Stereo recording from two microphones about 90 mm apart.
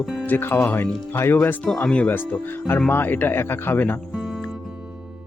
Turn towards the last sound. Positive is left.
turn(degrees=25)  # may be behind; listen again after turning